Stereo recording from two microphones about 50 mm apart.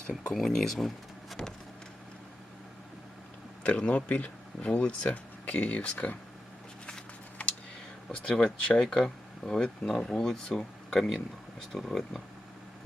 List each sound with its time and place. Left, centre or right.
0.3 s speech: centre
3.6 s speech: left
7.4 s computer keyboard: left
8.1 s speech: centre